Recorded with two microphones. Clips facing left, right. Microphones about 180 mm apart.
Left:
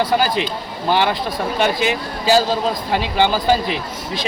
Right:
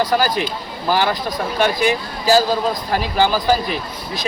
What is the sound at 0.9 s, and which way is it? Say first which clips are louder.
Speech: left 1 dB; 25° left (ahead or behind).